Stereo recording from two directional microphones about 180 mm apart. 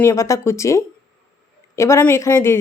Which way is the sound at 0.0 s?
15° left (ahead or behind).